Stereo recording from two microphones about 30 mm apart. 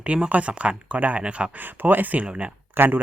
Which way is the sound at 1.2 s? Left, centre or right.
Right.